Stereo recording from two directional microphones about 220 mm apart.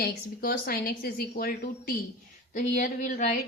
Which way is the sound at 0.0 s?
45° left (ahead or behind).